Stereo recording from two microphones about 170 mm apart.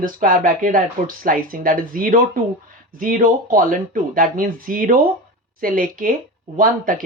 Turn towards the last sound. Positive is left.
turn(degrees=-55)  # may be behind; listen again after turning